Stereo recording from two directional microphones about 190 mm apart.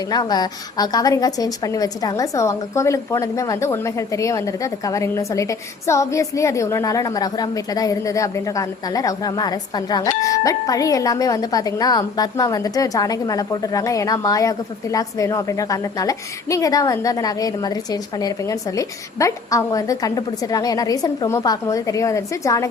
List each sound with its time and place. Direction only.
0.1 s a woman's voice: 20° left (ahead or behind)